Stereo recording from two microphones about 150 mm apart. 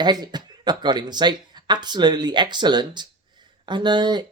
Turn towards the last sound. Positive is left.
turn(degrees=-30)  # may be behind; listen again after turning